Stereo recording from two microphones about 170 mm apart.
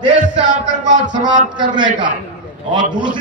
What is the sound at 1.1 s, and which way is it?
A man's voice, 25° right (ahead or behind).